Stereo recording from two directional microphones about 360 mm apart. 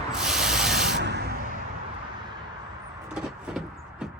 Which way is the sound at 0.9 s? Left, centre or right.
Right.